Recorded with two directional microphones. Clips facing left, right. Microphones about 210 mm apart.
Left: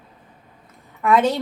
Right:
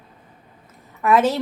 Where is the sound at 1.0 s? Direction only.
5° right (ahead or behind).